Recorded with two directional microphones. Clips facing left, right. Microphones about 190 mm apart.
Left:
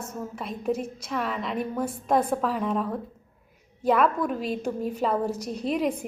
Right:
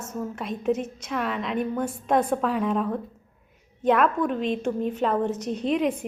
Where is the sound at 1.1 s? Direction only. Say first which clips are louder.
Right 2 dB; centre (ahead or behind).